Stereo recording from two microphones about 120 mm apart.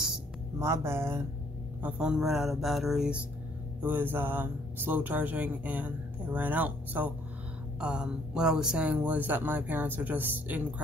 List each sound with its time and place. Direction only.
0.6 s speech: 20° right (ahead or behind)
1.8 s speech: 10° right (ahead or behind)
3.8 s speech: 15° right (ahead or behind)